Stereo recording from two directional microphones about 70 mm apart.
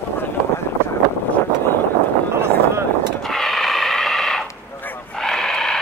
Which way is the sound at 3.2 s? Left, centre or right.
Centre.